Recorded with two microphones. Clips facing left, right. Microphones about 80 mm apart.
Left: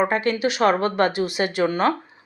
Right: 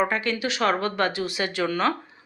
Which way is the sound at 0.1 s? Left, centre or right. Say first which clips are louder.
Left 5 dB; left.